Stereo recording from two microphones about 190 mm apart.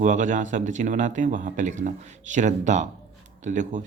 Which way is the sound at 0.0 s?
40° right (ahead or behind).